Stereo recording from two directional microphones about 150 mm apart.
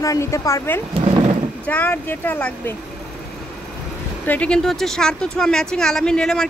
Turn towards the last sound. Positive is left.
turn(degrees=5)  # may be behind; listen again after turning